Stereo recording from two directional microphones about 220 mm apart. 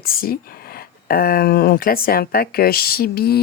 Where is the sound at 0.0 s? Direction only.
40° left (ahead or behind).